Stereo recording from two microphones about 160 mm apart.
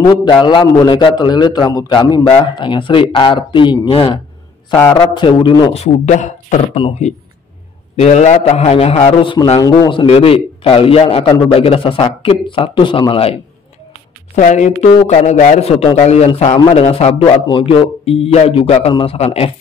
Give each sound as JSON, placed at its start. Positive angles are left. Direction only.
{"t": 0.0, "sound": "a man's voice", "side_deg": 30}
{"t": 5.7, "sound": "a man's voice", "side_deg": 45}
{"t": 14.3, "sound": "a man's voice", "side_deg": 50}